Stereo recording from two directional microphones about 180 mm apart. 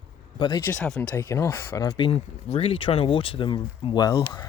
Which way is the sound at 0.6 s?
5° left (ahead or behind).